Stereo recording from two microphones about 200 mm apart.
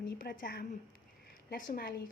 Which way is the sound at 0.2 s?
45° left (ahead or behind).